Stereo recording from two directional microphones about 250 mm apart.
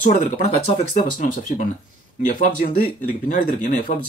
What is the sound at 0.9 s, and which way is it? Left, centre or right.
Speech, left.